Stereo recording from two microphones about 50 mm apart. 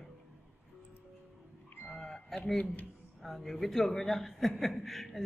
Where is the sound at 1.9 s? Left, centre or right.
Centre.